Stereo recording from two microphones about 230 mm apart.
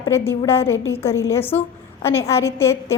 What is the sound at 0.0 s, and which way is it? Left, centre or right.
A woman's voice, centre.